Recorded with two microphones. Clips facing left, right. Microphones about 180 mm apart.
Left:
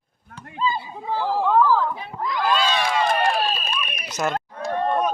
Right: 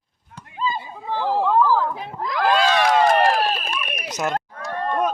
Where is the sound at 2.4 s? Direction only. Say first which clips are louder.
Right 4 dB; 65° right (ahead or behind).